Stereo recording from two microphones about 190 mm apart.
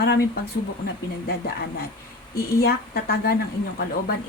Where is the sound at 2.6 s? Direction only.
55° left (ahead or behind).